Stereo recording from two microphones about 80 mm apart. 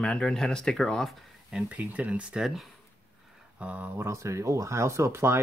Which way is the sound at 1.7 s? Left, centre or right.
Centre.